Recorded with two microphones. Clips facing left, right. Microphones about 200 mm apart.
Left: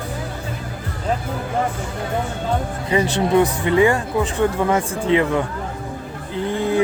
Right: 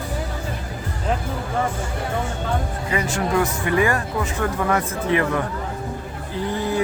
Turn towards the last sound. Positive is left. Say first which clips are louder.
# left 3 dB
turn(degrees=25)  # may be behind; listen again after turning